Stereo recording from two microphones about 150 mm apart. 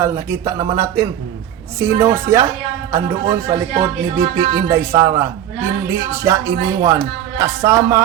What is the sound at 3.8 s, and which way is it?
Speech, 20° right (ahead or behind).